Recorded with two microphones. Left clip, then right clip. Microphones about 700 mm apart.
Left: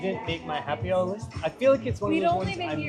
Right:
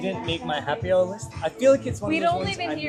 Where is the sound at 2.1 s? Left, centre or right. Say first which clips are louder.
Right 2 dB; right.